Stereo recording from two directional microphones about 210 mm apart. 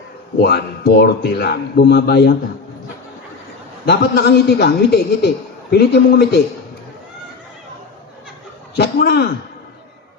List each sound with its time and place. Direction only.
0.3 s speech: 50° left (ahead or behind)
3.8 s speech: 50° left (ahead or behind)
8.7 s a man's voice: 50° left (ahead or behind)